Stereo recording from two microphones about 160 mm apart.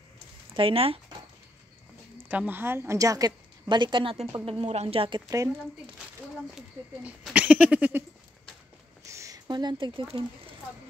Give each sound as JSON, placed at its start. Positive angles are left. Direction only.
{"t": 0.6, "sound": "speech", "side_deg": -35}
{"t": 2.1, "sound": "a woman's voice", "side_deg": -10}
{"t": 6.5, "sound": "speech", "side_deg": -5}
{"t": 9.0, "sound": "a sound", "side_deg": -20}